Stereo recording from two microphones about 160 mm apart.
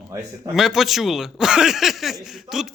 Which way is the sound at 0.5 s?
Centre (ahead or behind).